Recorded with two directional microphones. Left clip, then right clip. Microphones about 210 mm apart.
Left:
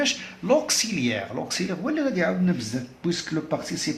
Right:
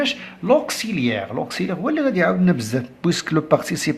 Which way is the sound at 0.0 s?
25° right (ahead or behind).